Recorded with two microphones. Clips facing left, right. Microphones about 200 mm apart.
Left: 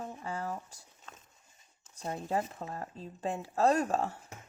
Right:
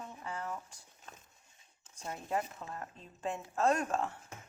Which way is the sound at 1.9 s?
35° left (ahead or behind).